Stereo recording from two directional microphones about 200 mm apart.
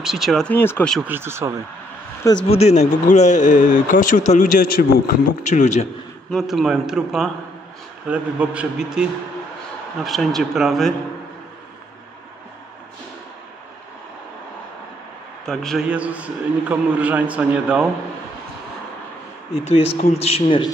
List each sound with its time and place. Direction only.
0.0 s speech: centre (ahead or behind)
1.0 s a man's voice: 10° right (ahead or behind)
2.2 s speech: 25° left (ahead or behind)
6.3 s speech: centre (ahead or behind)
15.4 s a man's voice: centre (ahead or behind)
19.5 s a man's voice: 30° left (ahead or behind)